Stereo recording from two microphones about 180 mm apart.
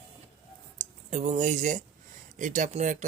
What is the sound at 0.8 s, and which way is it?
Speech, 45° right (ahead or behind).